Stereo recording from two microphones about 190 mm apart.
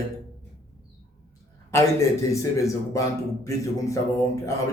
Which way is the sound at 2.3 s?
15° left (ahead or behind).